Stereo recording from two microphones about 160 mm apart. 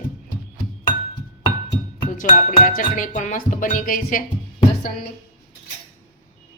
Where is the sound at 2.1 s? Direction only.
55° left (ahead or behind).